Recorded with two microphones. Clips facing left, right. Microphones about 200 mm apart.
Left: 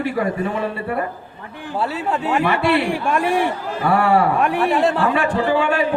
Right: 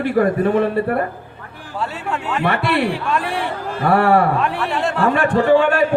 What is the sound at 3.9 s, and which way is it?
Speech, 55° right (ahead or behind).